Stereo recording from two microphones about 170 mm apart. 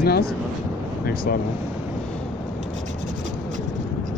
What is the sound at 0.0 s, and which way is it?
Speech, 65° left (ahead or behind).